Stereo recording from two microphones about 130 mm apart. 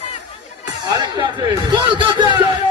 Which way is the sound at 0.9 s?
30° right (ahead or behind).